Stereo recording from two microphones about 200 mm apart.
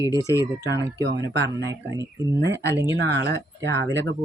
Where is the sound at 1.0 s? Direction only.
60° right (ahead or behind).